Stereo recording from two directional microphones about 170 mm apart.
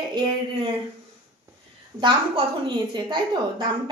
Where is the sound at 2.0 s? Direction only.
30° right (ahead or behind).